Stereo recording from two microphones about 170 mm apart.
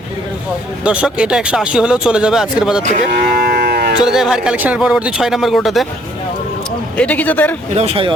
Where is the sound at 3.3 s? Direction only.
70° right (ahead or behind).